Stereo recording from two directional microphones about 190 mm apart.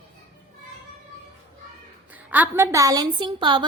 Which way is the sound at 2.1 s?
10° right (ahead or behind).